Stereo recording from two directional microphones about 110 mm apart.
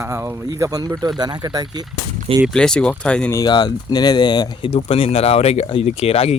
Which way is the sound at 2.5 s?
5° left (ahead or behind).